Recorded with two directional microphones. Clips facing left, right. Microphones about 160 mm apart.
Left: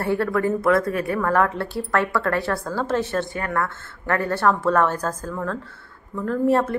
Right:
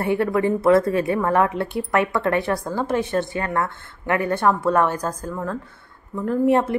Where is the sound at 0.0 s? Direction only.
20° right (ahead or behind).